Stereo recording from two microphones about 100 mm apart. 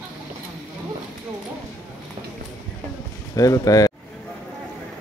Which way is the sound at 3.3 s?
35° left (ahead or behind).